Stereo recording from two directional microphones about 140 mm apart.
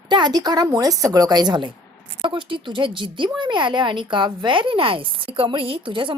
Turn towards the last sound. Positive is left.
turn(degrees=-35)  # may be behind; listen again after turning